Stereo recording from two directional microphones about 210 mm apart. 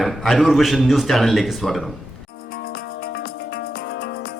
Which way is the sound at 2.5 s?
45° left (ahead or behind).